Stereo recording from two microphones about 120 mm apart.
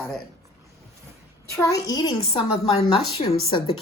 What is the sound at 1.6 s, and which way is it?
Speech, 30° left (ahead or behind).